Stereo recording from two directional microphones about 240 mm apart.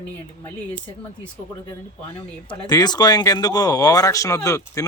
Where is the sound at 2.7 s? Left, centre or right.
Centre.